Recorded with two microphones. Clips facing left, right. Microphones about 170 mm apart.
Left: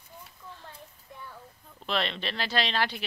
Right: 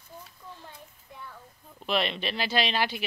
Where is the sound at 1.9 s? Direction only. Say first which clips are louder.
Right 2 dB; 10° right (ahead or behind).